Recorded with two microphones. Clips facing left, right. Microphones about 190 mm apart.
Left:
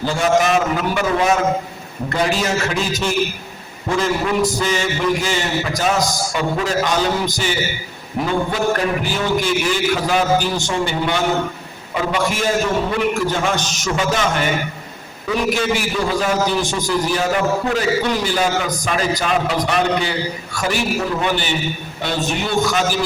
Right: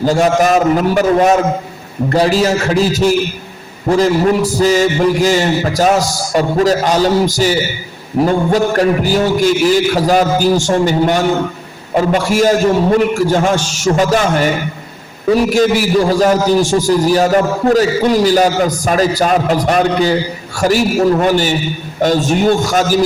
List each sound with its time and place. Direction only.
0.0 s a man's voice: 40° right (ahead or behind)